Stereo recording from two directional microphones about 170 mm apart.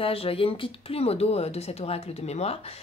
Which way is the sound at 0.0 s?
35° left (ahead or behind).